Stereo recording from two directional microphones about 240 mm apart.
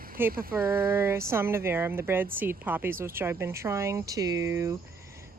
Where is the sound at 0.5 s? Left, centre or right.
Centre.